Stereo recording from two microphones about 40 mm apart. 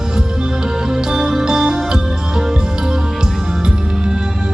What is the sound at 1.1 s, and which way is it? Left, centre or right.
Music, centre.